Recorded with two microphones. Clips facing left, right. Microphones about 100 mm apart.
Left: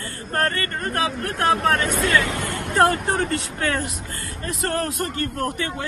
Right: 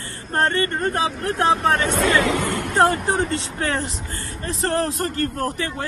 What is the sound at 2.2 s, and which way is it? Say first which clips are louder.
Speech: right 5 dB; 75° right (ahead or behind).